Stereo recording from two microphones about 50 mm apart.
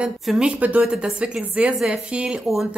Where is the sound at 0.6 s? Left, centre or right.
Right.